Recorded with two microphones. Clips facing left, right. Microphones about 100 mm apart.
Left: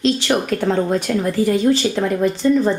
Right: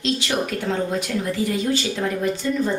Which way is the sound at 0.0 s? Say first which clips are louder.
Left 5 dB; 45° left (ahead or behind).